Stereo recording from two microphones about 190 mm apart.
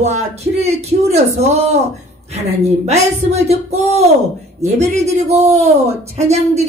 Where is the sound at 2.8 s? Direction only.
35° right (ahead or behind).